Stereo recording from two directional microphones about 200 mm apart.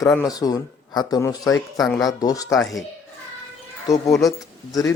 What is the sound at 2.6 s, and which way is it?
Speech, centre (ahead or behind).